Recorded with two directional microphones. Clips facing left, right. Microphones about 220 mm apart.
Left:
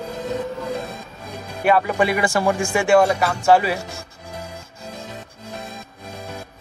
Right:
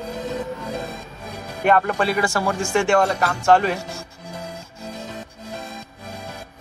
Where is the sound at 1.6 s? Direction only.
5° left (ahead or behind).